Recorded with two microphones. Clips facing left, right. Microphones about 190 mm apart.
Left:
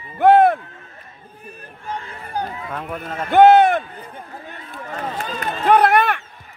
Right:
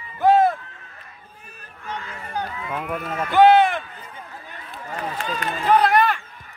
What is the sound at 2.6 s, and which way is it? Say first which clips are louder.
Speech: right 1 dB; 5° right (ahead or behind).